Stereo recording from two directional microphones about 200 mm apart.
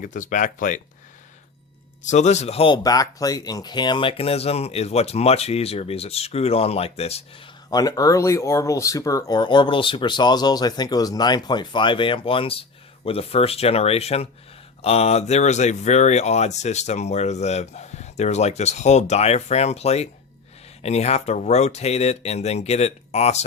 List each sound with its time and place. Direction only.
0.0 s speech: 40° left (ahead or behind)
2.0 s speech: 35° left (ahead or behind)
7.7 s speech: 20° left (ahead or behind)